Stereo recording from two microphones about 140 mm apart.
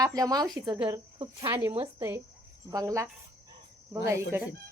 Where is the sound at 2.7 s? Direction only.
25° right (ahead or behind).